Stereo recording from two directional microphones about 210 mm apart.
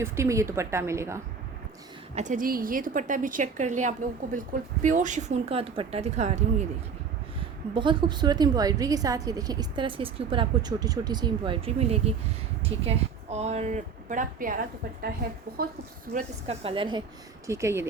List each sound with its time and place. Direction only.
0.0 s a woman's voice: 15° right (ahead or behind)
2.1 s speech: 35° right (ahead or behind)
7.7 s a woman's voice: 25° right (ahead or behind); by 15.7 s 45° right (ahead or behind)
16.1 s a woman's voice: 30° right (ahead or behind)
17.4 s a woman's voice: 15° right (ahead or behind)